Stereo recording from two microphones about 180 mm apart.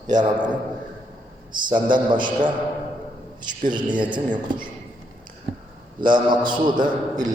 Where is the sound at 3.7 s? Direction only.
25° right (ahead or behind).